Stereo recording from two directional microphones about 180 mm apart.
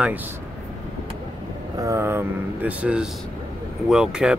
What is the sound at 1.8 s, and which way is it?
Speech, 15° right (ahead or behind).